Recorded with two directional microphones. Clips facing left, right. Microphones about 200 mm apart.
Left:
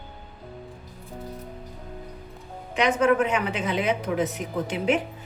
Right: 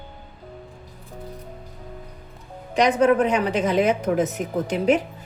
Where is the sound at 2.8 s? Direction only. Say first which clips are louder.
Right 3 dB; 35° right (ahead or behind).